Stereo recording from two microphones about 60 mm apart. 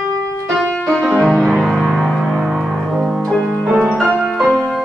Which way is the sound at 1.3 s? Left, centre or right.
Centre.